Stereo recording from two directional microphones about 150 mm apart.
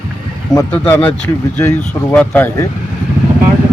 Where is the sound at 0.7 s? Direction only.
10° left (ahead or behind).